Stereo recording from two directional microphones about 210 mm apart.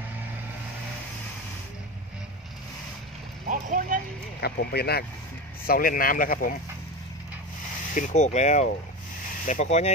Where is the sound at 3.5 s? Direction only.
40° right (ahead or behind).